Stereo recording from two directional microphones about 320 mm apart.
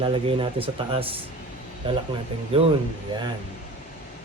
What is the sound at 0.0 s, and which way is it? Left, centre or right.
A man's voice, centre.